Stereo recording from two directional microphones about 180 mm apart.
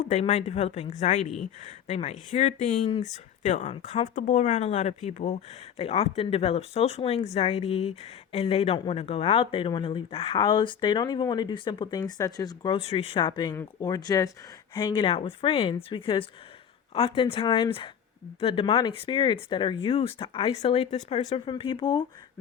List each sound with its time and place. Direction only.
0.0 s speech: 35° left (ahead or behind)
4.1 s speech: 45° left (ahead or behind); by 22.0 s 25° left (ahead or behind)